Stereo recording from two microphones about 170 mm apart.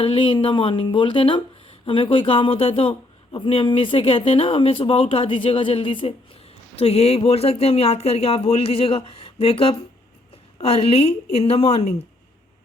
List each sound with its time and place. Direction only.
0.0 s speech: 30° left (ahead or behind)